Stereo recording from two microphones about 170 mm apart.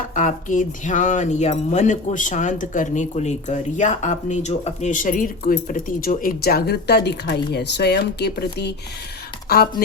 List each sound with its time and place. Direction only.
0.1 s speech: 50° left (ahead or behind); by 8.7 s 75° left (ahead or behind)
9.5 s speech: 65° left (ahead or behind)